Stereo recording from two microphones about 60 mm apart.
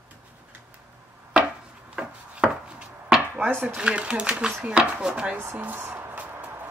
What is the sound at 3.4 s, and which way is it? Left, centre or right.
Chopping, right.